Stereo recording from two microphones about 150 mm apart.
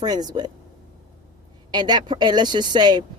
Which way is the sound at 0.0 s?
25° right (ahead or behind).